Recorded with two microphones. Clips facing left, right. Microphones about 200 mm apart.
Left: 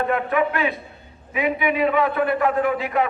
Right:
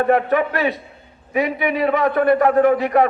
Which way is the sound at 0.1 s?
40° right (ahead or behind).